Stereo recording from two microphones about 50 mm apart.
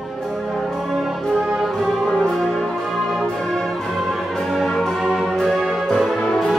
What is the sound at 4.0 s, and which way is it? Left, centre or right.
Music, centre.